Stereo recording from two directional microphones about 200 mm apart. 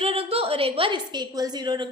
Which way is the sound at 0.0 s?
30° right (ahead or behind).